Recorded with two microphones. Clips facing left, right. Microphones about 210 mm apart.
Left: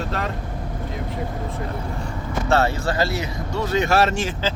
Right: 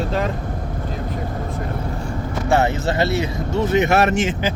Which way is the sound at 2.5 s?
20° right (ahead or behind).